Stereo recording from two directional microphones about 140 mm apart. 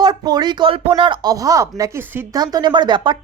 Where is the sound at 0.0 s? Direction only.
30° right (ahead or behind).